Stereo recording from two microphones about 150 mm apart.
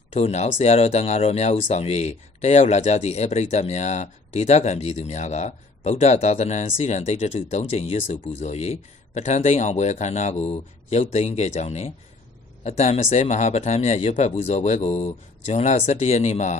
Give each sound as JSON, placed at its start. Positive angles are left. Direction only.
{"t": 0.1, "sound": "speech", "side_deg": 45}